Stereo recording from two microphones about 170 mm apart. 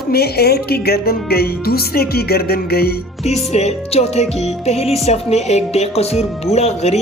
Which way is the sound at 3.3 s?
40° left (ahead or behind).